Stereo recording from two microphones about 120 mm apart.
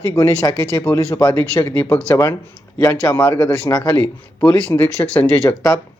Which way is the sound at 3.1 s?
15° left (ahead or behind).